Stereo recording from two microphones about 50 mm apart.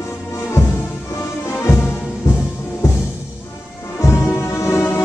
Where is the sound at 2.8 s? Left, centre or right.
Left.